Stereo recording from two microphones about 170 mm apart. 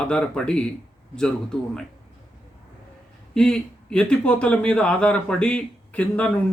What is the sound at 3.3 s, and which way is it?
A man's voice, 5° left (ahead or behind).